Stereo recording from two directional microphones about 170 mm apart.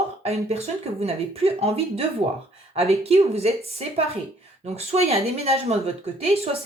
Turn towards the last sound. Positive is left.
turn(degrees=-40)  # may be behind; listen again after turning